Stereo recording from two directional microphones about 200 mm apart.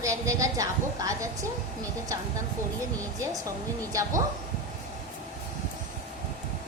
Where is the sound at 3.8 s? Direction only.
15° right (ahead or behind).